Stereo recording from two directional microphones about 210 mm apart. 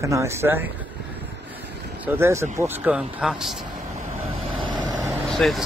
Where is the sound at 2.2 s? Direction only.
15° right (ahead or behind).